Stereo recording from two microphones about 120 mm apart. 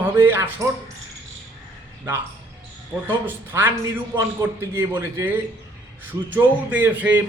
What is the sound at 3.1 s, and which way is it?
A man's voice, 20° right (ahead or behind).